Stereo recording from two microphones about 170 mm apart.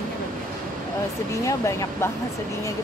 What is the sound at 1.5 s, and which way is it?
Speech, 20° left (ahead or behind).